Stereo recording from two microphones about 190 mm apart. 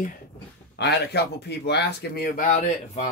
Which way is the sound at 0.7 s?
60° left (ahead or behind).